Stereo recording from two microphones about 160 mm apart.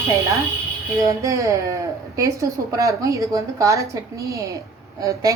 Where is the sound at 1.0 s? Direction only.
20° right (ahead or behind).